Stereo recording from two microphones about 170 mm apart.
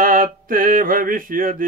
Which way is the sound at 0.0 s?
55° right (ahead or behind).